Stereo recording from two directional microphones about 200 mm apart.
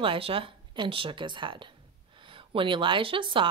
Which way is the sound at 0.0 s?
25° right (ahead or behind).